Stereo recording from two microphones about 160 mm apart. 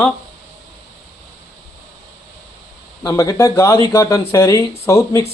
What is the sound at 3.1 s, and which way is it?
Speech, 20° left (ahead or behind).